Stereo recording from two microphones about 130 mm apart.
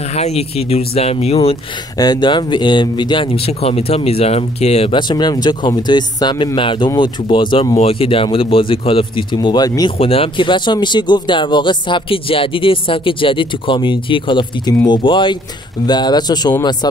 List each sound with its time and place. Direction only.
0.1 s speech: 55° left (ahead or behind)
2.0 s speech: 35° left (ahead or behind); by 4.9 s 55° left (ahead or behind)
4.9 s speech: 35° left (ahead or behind)
9.9 s speech: 45° left (ahead or behind)